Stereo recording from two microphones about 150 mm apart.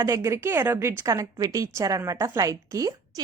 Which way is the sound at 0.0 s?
20° right (ahead or behind).